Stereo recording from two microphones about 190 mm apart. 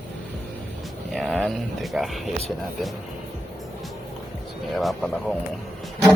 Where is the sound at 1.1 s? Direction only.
5° left (ahead or behind).